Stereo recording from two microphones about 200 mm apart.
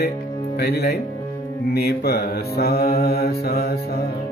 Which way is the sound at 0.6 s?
55° left (ahead or behind).